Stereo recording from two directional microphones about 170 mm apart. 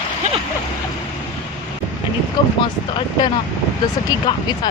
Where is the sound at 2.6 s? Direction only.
25° left (ahead or behind).